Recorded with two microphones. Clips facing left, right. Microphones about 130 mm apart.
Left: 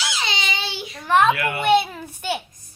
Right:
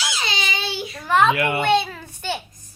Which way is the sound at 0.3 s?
25° left (ahead or behind).